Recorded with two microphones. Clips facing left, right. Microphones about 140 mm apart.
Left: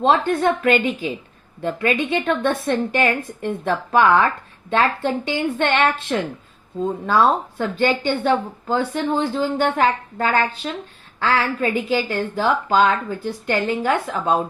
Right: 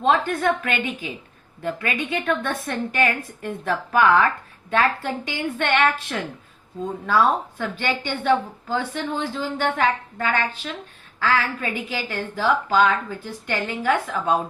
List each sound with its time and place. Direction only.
0.0 s a woman's voice: 30° left (ahead or behind)